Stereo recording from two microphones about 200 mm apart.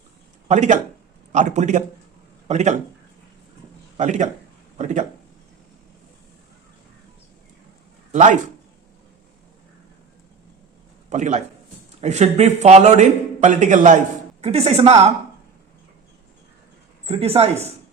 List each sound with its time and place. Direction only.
0.4 s a man's voice: 35° right (ahead or behind)
3.9 s a man's voice: 35° right (ahead or behind)
8.1 s speech: 40° right (ahead or behind)
11.1 s a man's voice: 35° right (ahead or behind)
17.1 s speech: 30° right (ahead or behind)